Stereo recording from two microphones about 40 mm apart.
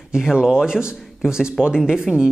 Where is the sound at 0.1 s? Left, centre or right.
Centre.